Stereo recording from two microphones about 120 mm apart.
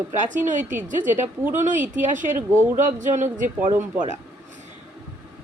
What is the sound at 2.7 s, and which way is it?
Speech, 90° right.